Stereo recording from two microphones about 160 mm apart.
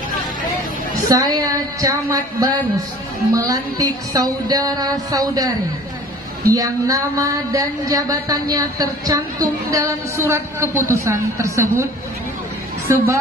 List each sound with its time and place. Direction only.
1.0 s speech: 25° right (ahead or behind)
6.5 s a woman's voice: 20° right (ahead or behind)